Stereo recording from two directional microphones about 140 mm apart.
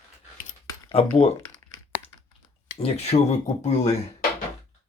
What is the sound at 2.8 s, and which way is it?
Speech, 45° left (ahead or behind).